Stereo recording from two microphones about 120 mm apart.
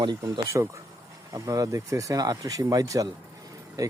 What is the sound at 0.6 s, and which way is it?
Speech, 25° right (ahead or behind).